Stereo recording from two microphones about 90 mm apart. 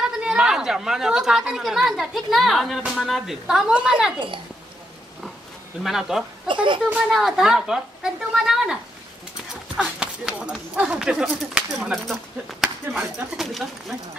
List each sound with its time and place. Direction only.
0.0 s speech: 10° right (ahead or behind)
5.8 s speech: 5° right (ahead or behind)
6.4 s speech: 65° right (ahead or behind)
7.0 s speech: 5° right (ahead or behind)
9.8 s speech: 10° right (ahead or behind)